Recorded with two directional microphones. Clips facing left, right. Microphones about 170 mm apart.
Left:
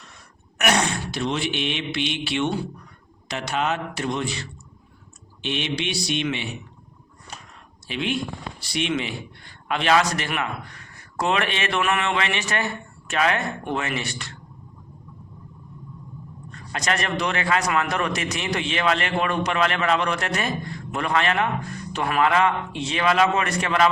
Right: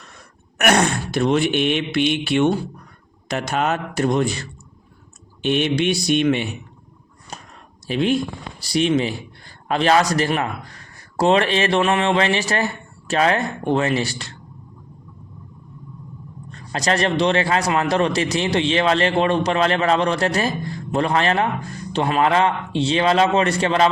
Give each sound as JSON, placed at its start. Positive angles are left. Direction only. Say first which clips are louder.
{"t": 0.6, "sound": "speech", "louder": "right 5 dB", "side_deg": -55}
{"t": 7.3, "sound": "a sound", "louder": "right 4 dB", "side_deg": -40}
{"t": 8.6, "sound": "a man's voice", "louder": "right 7 dB", "side_deg": -35}
{"t": 16.5, "sound": "a man's voice", "louder": "right 5 dB", "side_deg": -35}